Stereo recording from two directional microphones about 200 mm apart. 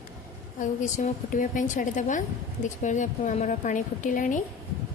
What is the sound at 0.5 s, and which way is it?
A woman's voice, 35° left (ahead or behind).